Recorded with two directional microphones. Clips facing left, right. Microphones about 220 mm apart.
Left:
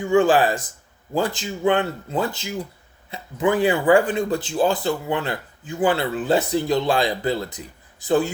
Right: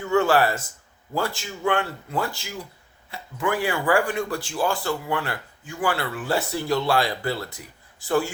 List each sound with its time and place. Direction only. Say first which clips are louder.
0.0 s speech: left 3 dB; 15° left (ahead or behind)